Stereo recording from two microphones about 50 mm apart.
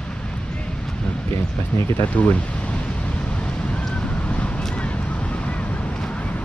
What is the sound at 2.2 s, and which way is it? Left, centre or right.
Speech, left.